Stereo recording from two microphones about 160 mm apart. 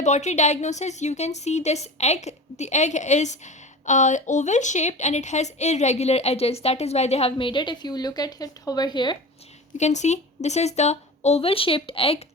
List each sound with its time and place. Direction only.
0.0 s a woman's voice: 45° left (ahead or behind); by 9.1 s 30° left (ahead or behind)
9.7 s a woman's voice: 45° left (ahead or behind)